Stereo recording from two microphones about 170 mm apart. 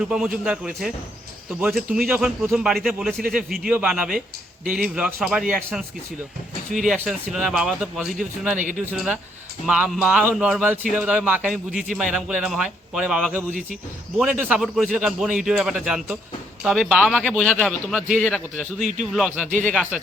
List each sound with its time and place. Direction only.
0.1 s speech: 5° right (ahead or behind)
13.5 s speech: 50° right (ahead or behind)
14.2 s speech: 5° right (ahead or behind)